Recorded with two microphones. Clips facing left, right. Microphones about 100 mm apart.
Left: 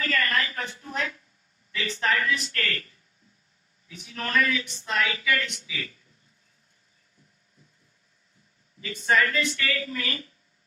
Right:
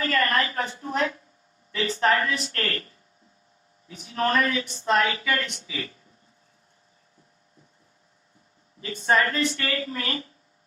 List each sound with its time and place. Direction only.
0.0 s a woman's voice: 35° right (ahead or behind)
8.8 s speech: 35° right (ahead or behind)